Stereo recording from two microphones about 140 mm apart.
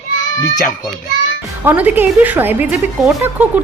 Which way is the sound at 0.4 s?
25° left (ahead or behind).